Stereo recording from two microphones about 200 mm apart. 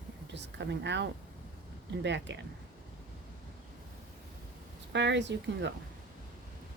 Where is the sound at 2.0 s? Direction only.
60° right (ahead or behind).